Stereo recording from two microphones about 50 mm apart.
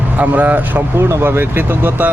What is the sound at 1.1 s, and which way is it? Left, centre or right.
Speech, right.